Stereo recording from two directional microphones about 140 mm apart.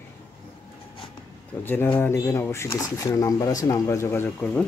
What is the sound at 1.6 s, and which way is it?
Speech, 15° left (ahead or behind).